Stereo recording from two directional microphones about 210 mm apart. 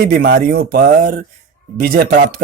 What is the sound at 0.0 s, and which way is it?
Speech, 50° right (ahead or behind).